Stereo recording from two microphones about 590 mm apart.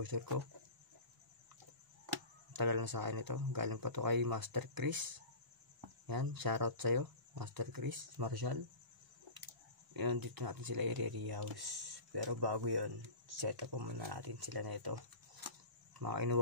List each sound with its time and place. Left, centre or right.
0.0 s speech: right
2.5 s speech: right
9.9 s speech: right
16.0 s speech: right